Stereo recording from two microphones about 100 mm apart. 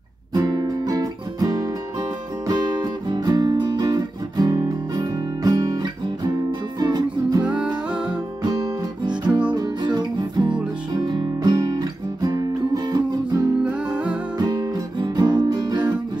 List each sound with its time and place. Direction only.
0.3 s music: 40° right (ahead or behind)
7.4 s music: 10° right (ahead or behind)
9.5 s music: 45° right (ahead or behind)
10.9 s guitar: 45° right (ahead or behind)
13.6 s music: 10° right (ahead or behind)
14.4 s music: 40° right (ahead or behind)